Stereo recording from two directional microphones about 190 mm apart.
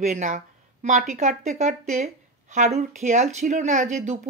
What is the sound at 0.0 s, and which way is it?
Speech, 40° right (ahead or behind).